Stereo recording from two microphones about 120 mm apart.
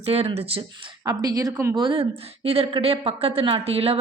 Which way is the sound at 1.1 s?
30° right (ahead or behind).